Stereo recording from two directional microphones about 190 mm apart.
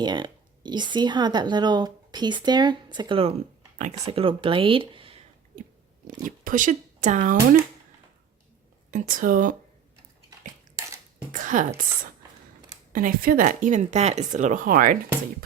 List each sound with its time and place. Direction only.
0.0 s a woman's voice: 25° right (ahead or behind)
5.5 s biting: 45° right (ahead or behind)
6.2 s speech: 45° right (ahead or behind)
8.9 s speech: 45° right (ahead or behind)
11.3 s a woman's voice: 40° right (ahead or behind)
12.9 s speech: 45° right (ahead or behind)